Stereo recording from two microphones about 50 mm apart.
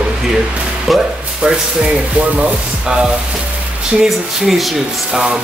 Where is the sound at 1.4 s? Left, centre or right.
Right.